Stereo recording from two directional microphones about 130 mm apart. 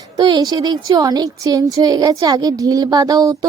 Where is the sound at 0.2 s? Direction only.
35° right (ahead or behind).